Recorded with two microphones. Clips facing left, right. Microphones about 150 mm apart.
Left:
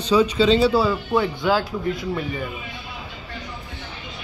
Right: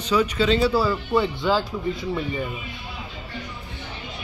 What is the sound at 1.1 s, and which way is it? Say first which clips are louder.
Speech: left 1 dB; 5° left (ahead or behind).